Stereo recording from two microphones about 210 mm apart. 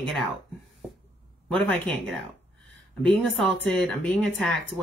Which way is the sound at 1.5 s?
5° left (ahead or behind).